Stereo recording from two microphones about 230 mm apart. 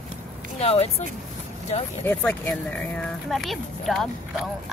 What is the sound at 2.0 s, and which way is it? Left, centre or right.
Speech, centre.